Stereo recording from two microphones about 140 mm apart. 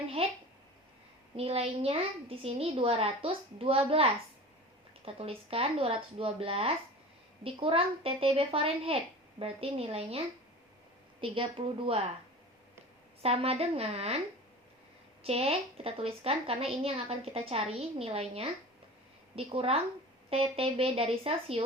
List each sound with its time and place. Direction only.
0.2 s a woman's voice: 45° right (ahead or behind)
1.4 s a woman's voice: 45° right (ahead or behind)
11.2 s a woman's voice: 40° right (ahead or behind)
13.2 s a woman's voice: 45° right (ahead or behind)
15.2 s a woman's voice: 45° right (ahead or behind)